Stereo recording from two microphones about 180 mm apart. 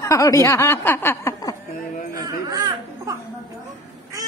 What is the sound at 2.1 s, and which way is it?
Speech, 20° right (ahead or behind).